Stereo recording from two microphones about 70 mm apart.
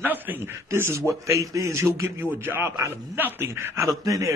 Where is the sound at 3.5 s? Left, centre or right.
Right.